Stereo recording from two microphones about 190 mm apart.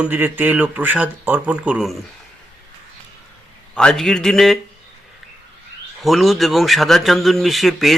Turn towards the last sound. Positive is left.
turn(degrees=0)  # may be behind; listen again after turning